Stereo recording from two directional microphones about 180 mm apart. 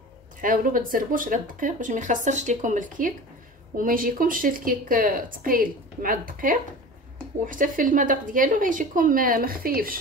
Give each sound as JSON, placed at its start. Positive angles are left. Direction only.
{"t": 0.4, "sound": "a woman's voice", "side_deg": -50}